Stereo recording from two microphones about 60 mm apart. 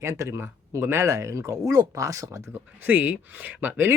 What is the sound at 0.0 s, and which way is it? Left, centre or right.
Speech, right.